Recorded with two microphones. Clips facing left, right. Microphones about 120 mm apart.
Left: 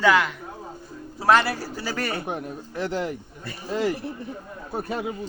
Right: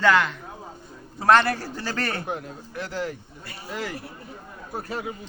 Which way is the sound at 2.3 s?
25° left (ahead or behind).